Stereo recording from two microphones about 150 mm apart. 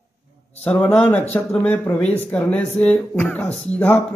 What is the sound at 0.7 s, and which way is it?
Speech, 5° left (ahead or behind).